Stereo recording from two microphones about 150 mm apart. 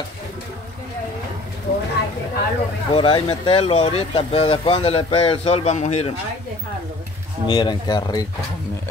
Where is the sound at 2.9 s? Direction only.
35° left (ahead or behind).